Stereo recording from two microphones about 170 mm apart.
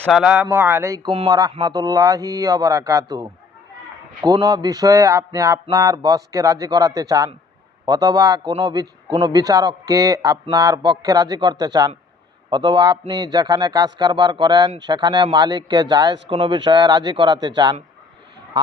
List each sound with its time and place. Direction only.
0.1 s a man's voice: 5° right (ahead or behind); by 17.7 s 25° right (ahead or behind)